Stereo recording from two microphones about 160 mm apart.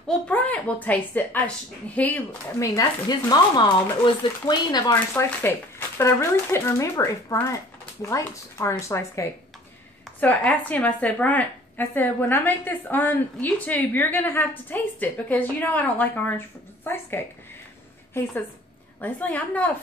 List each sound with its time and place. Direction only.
0.3 s speech: 10° left (ahead or behind)
2.6 s speech: 20° left (ahead or behind)
4.9 s speech: 15° left (ahead or behind)